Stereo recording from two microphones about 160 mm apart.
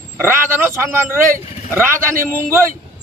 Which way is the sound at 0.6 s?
15° right (ahead or behind).